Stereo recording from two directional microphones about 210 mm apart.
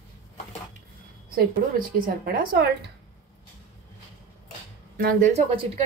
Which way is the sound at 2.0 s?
40° right (ahead or behind).